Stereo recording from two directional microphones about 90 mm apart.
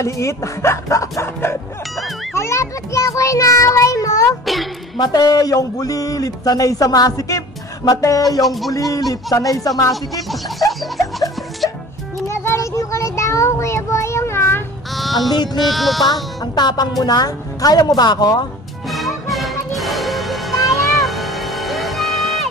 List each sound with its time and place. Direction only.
0.0 s speech: 35° left (ahead or behind)
2.3 s child singing: 30° left (ahead or behind)
4.9 s speech: 50° left (ahead or behind)
8.4 s a sound: centre (ahead or behind)
9.1 s speech: 40° left (ahead or behind)
12.3 s child singing: 30° left (ahead or behind)
15.0 s a sound: centre (ahead or behind)
15.3 s speech: 50° left (ahead or behind)
15.6 s a sound: centre (ahead or behind)
16.5 s speech: 50° left (ahead or behind)
18.9 s music: centre (ahead or behind)